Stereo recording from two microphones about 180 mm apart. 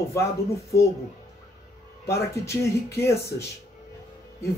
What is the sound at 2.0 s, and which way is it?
Speech, 15° left (ahead or behind).